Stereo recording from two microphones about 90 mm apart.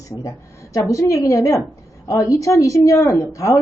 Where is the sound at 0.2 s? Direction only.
40° left (ahead or behind).